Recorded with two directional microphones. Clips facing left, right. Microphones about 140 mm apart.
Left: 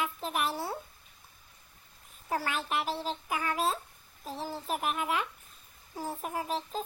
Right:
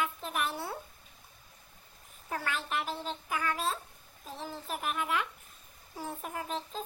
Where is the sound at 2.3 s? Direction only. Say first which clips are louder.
Left 3 dB; 35° left (ahead or behind).